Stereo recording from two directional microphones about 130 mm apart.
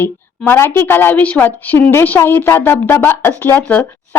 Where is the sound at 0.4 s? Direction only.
20° left (ahead or behind).